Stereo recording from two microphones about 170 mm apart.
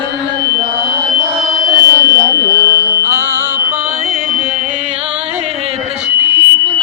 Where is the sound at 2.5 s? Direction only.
20° left (ahead or behind).